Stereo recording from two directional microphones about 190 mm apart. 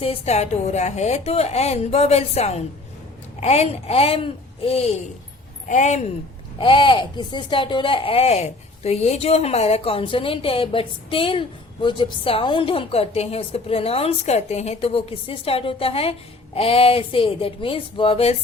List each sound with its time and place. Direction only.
0.0 s a woman's voice: 30° left (ahead or behind)
6.6 s speech: 25° left (ahead or behind)